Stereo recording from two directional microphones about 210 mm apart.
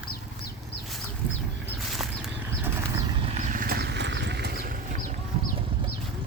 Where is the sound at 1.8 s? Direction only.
Centre (ahead or behind); by 5.2 s 40° right (ahead or behind).